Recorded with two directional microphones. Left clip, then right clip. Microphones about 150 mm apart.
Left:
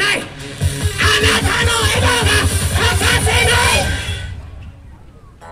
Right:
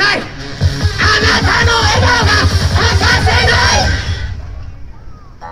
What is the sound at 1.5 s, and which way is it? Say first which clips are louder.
Music: right 5 dB; 30° left (ahead or behind).